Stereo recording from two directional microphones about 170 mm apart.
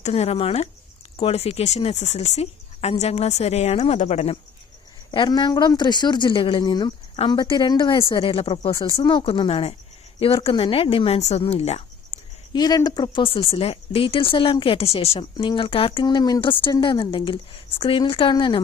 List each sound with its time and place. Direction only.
0.0 s speech: 40° left (ahead or behind)
5.1 s speech: 25° left (ahead or behind)
8.7 s a woman's voice: 20° left (ahead or behind); by 12.2 s 40° left (ahead or behind)
12.5 s speech: 25° left (ahead or behind)